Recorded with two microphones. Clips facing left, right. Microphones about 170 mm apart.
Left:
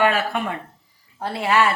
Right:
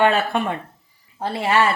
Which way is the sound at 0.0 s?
30° right (ahead or behind).